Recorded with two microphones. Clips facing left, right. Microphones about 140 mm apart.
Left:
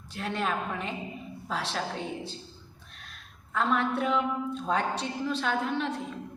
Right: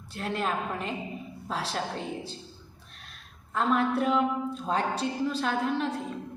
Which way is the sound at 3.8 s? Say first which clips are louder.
Right 2 dB; 35° right (ahead or behind).